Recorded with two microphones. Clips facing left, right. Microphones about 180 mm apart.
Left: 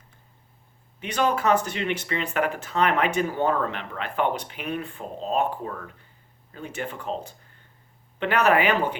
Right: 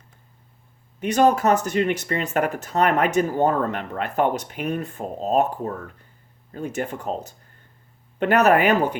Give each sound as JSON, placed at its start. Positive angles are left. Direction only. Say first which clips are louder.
{"t": 0.9, "sound": "speech", "louder": "right 6 dB", "side_deg": -45}